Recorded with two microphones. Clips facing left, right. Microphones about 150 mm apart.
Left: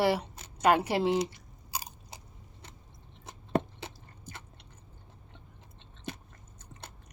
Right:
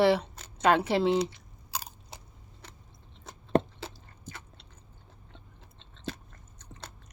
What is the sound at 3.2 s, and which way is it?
Chewing, 15° left (ahead or behind).